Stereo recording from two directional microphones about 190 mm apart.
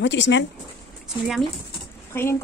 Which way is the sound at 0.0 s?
70° left (ahead or behind).